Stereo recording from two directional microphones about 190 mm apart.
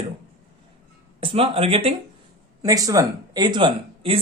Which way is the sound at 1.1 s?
30° right (ahead or behind).